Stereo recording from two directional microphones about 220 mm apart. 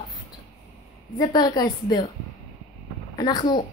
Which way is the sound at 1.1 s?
20° left (ahead or behind).